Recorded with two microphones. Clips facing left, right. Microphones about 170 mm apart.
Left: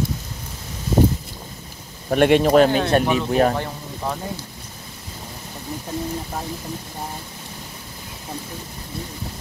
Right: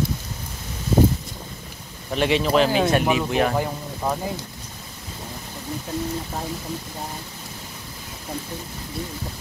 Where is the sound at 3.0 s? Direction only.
5° right (ahead or behind).